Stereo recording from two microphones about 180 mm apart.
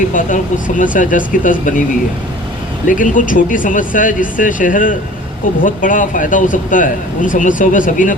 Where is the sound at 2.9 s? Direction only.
45° left (ahead or behind).